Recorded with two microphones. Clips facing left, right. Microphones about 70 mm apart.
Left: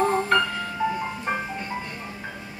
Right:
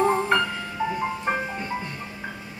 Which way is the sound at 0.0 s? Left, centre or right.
Centre.